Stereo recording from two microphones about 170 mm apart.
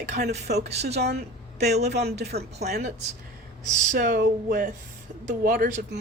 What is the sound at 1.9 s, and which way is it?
Speech, 75° right (ahead or behind).